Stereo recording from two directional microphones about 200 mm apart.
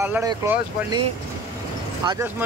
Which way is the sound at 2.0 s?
20° right (ahead or behind).